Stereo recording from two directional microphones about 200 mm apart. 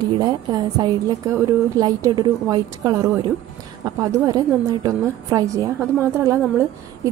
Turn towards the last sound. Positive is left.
turn(degrees=-15)  # may be behind; listen again after turning